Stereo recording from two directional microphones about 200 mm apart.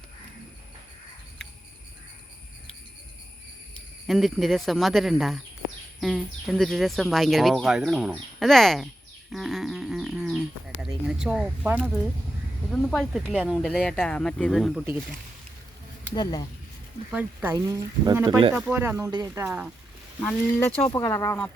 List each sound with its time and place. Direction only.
4.0 s speech: centre (ahead or behind)
9.3 s a sound: centre (ahead or behind)
12.7 s speech: 5° left (ahead or behind)
16.1 s speech: 20° left (ahead or behind)
17.1 s speech: 5° right (ahead or behind)
17.5 s speech: 15° right (ahead or behind)
18.5 s speech: 10° right (ahead or behind)
20.2 s speech: 5° left (ahead or behind)